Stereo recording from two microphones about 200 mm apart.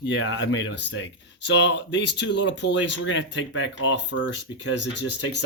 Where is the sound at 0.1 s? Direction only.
65° left (ahead or behind).